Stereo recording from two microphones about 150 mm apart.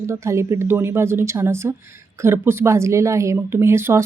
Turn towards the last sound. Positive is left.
turn(degrees=-15)  # may be behind; listen again after turning